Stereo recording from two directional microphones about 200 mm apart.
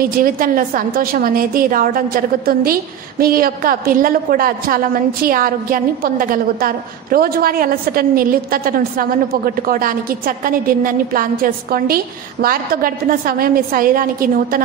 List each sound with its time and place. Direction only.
0.0 s a woman's voice: 45° right (ahead or behind)